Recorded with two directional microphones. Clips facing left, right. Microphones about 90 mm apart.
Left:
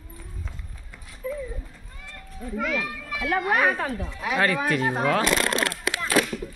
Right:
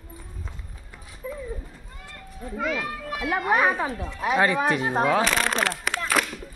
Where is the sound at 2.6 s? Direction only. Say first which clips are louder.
Even; 25° right (ahead or behind).